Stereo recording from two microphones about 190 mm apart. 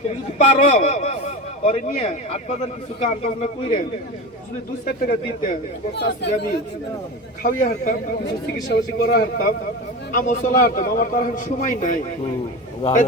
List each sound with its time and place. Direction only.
0.3 s a man's voice: 35° left (ahead or behind)
4.9 s a man's voice: 50° left (ahead or behind)
7.4 s a man's voice: 45° left (ahead or behind)
10.1 s a man's voice: 45° left (ahead or behind)